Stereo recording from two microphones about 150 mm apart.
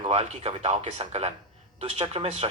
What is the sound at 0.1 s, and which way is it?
A man's voice, 45° right (ahead or behind).